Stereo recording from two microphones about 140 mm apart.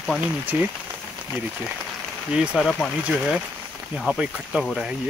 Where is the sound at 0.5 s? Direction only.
15° right (ahead or behind).